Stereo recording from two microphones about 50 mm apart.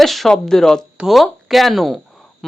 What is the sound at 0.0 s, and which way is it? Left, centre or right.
Speech, centre.